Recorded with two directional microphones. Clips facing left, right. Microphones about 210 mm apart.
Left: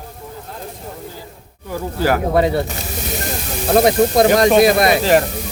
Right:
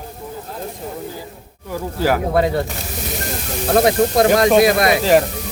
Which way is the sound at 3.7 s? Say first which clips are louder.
Left 2 dB; 20° left (ahead or behind).